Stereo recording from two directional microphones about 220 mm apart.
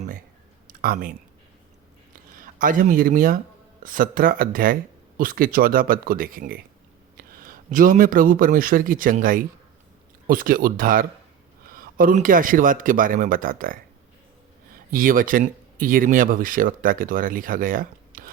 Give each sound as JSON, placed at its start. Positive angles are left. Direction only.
{"t": 0.7, "sound": "speech", "side_deg": -40}
{"t": 2.4, "sound": "speech", "side_deg": -40}
{"t": 14.8, "sound": "speech", "side_deg": -40}